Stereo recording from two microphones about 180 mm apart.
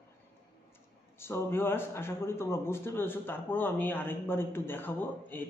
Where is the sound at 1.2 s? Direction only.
15° left (ahead or behind).